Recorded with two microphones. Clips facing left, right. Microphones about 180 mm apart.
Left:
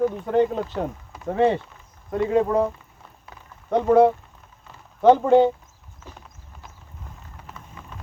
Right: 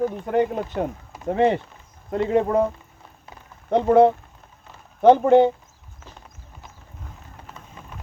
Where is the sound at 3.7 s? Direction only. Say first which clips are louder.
Right 1 dB; 20° right (ahead or behind).